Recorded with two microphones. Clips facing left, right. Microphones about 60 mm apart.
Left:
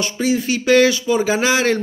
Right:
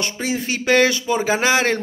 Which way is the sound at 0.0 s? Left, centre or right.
Right.